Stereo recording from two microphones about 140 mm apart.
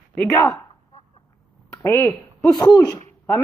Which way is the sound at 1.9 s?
20° left (ahead or behind).